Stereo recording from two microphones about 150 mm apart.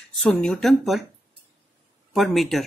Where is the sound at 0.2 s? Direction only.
5° left (ahead or behind).